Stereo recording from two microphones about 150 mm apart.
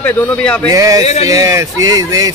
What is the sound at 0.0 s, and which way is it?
Speech, 5° left (ahead or behind).